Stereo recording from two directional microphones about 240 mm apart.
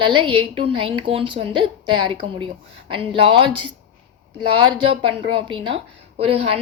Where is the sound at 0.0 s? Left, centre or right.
Right.